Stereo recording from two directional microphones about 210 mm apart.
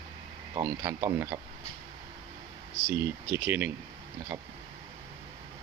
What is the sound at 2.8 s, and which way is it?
Speech, 10° right (ahead or behind).